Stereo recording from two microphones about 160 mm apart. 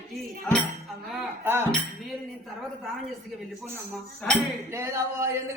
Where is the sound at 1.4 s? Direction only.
15° right (ahead or behind).